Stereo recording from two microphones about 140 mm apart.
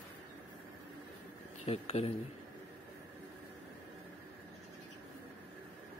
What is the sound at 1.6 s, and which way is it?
Speech, 45° left (ahead or behind).